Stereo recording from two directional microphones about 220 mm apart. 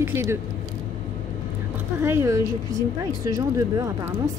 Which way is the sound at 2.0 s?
10° right (ahead or behind).